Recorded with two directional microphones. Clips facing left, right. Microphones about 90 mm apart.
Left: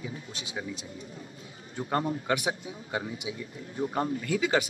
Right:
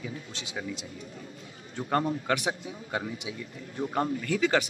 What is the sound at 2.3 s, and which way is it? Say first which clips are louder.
A man's voice: even; 5° left (ahead or behind).